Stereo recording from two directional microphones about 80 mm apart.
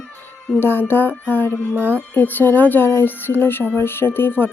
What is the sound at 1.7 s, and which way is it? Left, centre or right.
Speech, right.